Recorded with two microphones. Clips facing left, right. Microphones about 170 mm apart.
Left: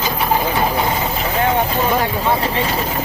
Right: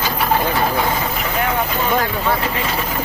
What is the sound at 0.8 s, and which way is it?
Vehicle, 25° left (ahead or behind).